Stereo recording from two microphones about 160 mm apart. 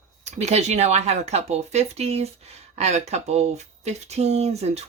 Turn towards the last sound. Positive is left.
turn(degrees=-40)  # may be behind; listen again after turning